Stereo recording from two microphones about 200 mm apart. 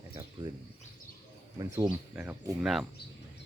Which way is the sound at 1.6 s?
20° right (ahead or behind).